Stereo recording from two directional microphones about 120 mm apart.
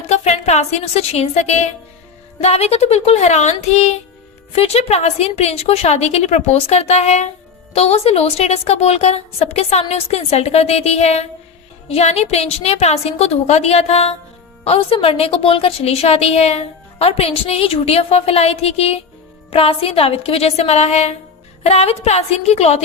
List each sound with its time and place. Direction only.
0.1 s speech: 65° left (ahead or behind)
2.4 s a woman's voice: 60° left (ahead or behind)